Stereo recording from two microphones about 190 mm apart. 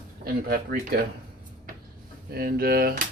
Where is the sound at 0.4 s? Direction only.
50° right (ahead or behind).